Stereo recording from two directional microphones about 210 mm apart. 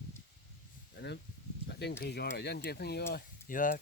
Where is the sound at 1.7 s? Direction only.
50° left (ahead or behind).